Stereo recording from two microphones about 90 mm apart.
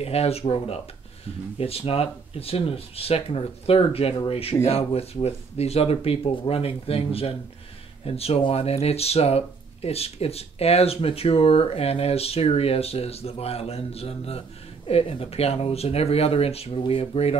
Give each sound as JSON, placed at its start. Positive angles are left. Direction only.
{"t": 0.0, "sound": "speech", "side_deg": 90}